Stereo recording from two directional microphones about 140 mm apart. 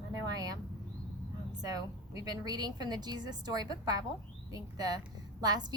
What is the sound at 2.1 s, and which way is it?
A woman's voice, 25° right (ahead or behind).